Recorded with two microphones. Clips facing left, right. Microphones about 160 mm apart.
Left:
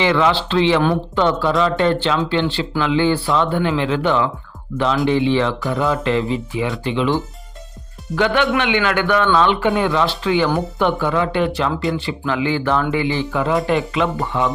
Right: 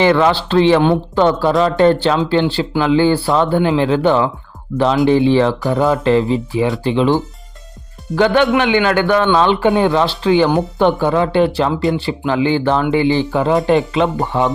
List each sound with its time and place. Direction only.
0.0 s speech: 45° right (ahead or behind); by 14.5 s 30° right (ahead or behind)